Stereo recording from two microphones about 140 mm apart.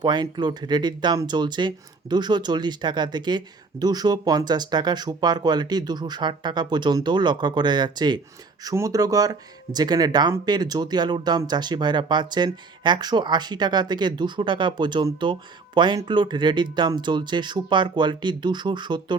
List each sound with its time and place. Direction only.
0.0 s speech: 30° right (ahead or behind)